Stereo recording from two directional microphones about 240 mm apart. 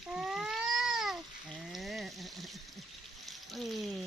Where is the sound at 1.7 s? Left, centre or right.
Centre.